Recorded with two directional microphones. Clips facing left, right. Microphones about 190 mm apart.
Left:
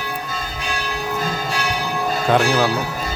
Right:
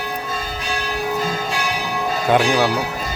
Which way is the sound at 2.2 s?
10° right (ahead or behind).